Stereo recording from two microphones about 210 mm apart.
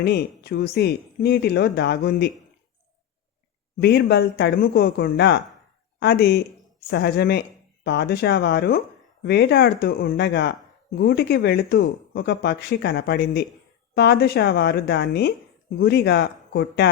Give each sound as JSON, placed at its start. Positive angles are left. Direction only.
{"t": 0.0, "sound": "speech", "side_deg": 50}
{"t": 3.8, "sound": "speech", "side_deg": 50}